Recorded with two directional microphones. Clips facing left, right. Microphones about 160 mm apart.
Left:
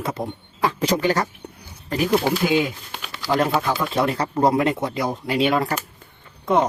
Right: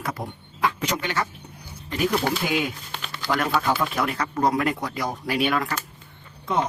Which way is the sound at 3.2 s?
25° left (ahead or behind).